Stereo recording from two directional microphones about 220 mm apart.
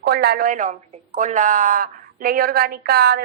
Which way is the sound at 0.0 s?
45° right (ahead or behind).